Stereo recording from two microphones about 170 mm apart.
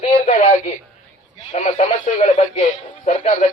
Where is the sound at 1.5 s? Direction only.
45° left (ahead or behind).